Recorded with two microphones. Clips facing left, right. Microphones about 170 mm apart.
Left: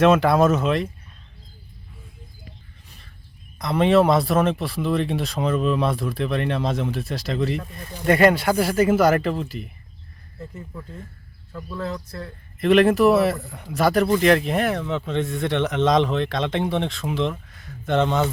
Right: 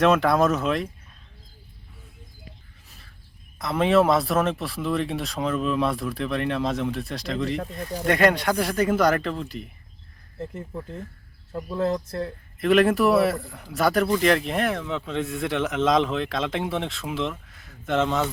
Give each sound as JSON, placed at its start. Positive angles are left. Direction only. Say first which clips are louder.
{"t": 0.0, "sound": "speech", "louder": "left 3 dB", "side_deg": 0}
{"t": 3.6, "sound": "speech", "louder": "left 2 dB", "side_deg": 0}
{"t": 11.5, "sound": "speech", "louder": "right 5 dB", "side_deg": -25}
{"t": 12.5, "sound": "speech", "louder": "left 3 dB", "side_deg": 0}